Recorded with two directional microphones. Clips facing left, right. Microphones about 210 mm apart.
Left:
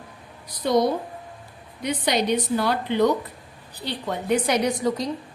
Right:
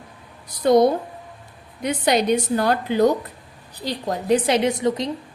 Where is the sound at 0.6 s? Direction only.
55° right (ahead or behind).